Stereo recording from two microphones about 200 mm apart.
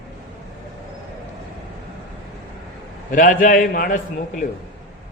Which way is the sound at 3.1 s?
40° left (ahead or behind).